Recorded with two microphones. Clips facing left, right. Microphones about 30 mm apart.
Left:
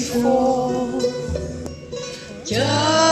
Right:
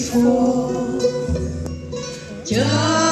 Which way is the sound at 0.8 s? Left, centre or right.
Centre.